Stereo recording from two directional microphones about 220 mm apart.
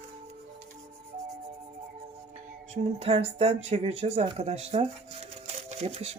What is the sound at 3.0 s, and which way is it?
Speech, 25° right (ahead or behind).